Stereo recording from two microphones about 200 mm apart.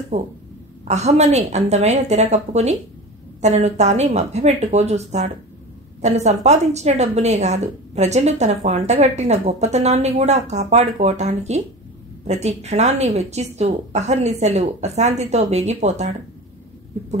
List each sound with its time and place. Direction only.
0.1 s a woman's voice: 35° right (ahead or behind)